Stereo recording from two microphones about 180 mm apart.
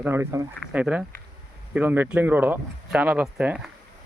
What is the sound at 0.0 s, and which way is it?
Speech, 15° right (ahead or behind).